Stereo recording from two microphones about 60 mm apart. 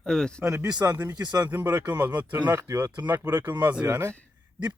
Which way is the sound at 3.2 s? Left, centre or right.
Right.